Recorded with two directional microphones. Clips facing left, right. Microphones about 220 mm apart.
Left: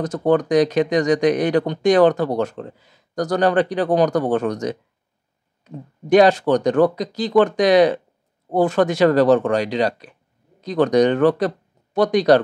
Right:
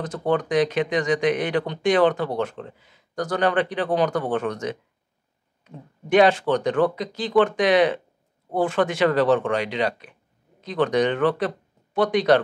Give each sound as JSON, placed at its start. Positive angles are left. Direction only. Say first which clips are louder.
{"t": 0.0, "sound": "speech", "louder": "left 6 dB", "side_deg": 40}